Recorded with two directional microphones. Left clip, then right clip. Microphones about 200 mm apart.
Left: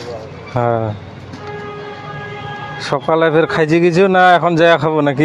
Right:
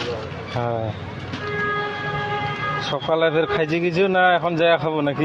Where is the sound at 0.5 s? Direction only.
60° left (ahead or behind).